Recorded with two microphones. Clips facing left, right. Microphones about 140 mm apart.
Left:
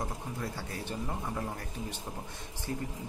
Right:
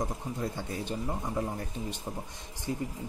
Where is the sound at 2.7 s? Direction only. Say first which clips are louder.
Right 3 dB; 20° right (ahead or behind).